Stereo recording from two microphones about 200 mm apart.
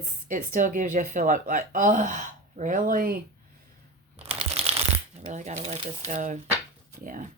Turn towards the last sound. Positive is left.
turn(degrees=-35)  # may be behind; listen again after turning